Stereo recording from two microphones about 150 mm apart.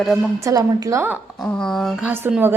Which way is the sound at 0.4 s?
20° right (ahead or behind).